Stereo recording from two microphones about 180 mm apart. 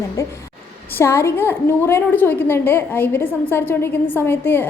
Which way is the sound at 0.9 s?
15° left (ahead or behind).